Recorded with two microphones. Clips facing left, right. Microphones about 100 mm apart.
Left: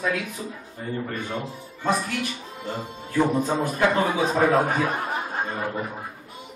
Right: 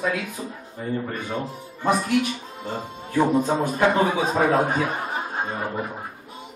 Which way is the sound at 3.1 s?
20° right (ahead or behind).